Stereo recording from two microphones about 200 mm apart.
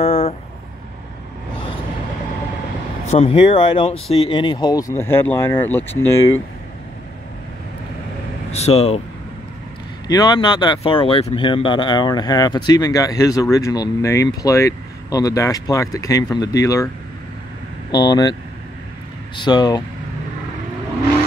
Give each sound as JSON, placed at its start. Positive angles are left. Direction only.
{"t": 0.0, "sound": "vehicle", "side_deg": 30}
{"t": 3.1, "sound": "speech", "side_deg": 30}
{"t": 8.5, "sound": "speech", "side_deg": 35}
{"t": 10.0, "sound": "speech", "side_deg": 20}
{"t": 17.9, "sound": "speech", "side_deg": 20}
{"t": 19.3, "sound": "speech", "side_deg": 20}